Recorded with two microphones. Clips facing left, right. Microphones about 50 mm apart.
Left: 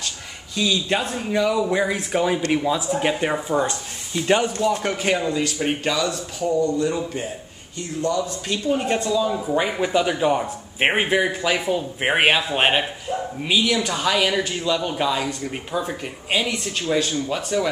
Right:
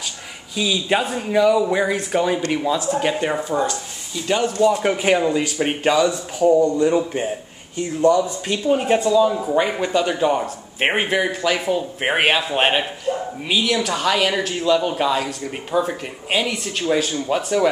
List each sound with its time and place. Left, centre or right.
0.6 s speech: centre
3.6 s speech: left
4.5 s speech: centre
9.5 s speech: centre